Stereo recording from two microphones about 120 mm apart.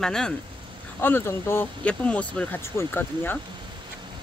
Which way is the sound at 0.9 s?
20° left (ahead or behind).